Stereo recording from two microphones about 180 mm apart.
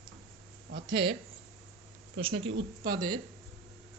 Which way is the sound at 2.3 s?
85° right.